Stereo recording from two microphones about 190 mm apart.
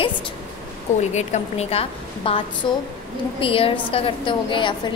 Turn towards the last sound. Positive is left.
turn(degrees=25)  # may be behind; listen again after turning